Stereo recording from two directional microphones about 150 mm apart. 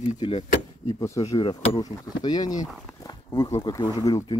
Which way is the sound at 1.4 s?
35° left (ahead or behind).